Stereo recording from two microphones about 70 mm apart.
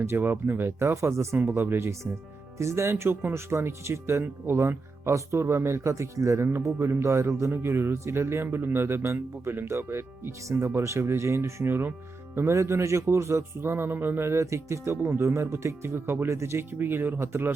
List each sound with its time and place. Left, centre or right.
0.0 s speech: right
12.5 s speech: right